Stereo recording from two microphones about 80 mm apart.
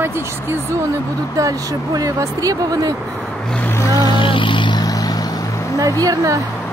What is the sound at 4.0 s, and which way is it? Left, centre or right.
Vehicle, left.